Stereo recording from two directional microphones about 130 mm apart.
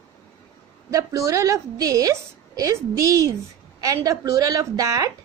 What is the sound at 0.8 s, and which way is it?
A woman's voice, 25° right (ahead or behind).